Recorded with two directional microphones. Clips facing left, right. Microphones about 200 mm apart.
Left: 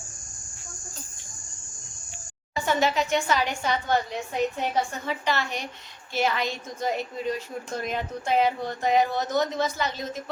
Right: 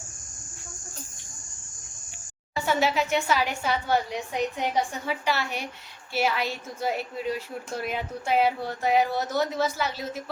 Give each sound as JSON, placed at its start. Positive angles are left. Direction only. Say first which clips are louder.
{"t": 2.6, "sound": "a woman's voice", "louder": "even", "side_deg": -5}